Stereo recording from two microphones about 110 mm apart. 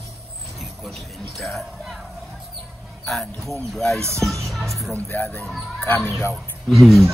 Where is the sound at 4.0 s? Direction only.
25° right (ahead or behind).